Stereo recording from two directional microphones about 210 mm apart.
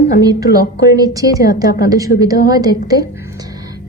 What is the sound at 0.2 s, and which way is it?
A woman's voice, 15° right (ahead or behind).